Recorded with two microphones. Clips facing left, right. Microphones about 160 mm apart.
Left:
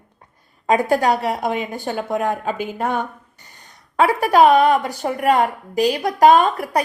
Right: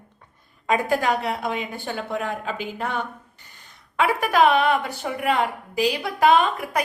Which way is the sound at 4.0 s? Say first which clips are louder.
Left 5 dB; 35° left (ahead or behind).